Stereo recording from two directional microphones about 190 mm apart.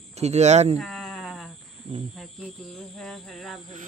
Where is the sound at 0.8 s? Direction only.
Centre (ahead or behind).